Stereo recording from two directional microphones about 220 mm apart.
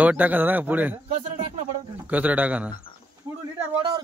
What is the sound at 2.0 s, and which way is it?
Speech, 5° right (ahead or behind).